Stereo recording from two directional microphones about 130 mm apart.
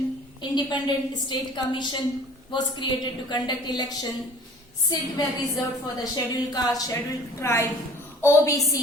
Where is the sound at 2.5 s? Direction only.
35° left (ahead or behind).